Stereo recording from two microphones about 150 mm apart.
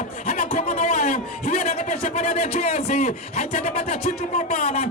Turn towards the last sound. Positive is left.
turn(degrees=45)  # may be behind; listen again after turning